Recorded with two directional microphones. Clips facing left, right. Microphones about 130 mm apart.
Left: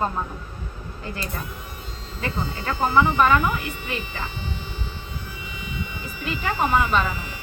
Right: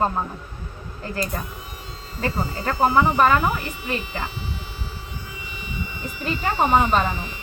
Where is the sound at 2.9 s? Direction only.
40° right (ahead or behind).